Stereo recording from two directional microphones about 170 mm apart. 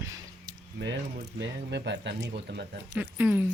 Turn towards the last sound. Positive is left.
turn(degrees=-10)  # may be behind; listen again after turning